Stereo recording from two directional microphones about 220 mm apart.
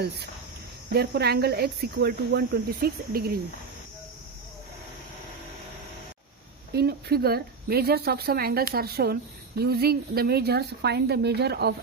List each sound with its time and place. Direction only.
0.9 s speech: 45° right (ahead or behind)
6.7 s speech: 45° right (ahead or behind)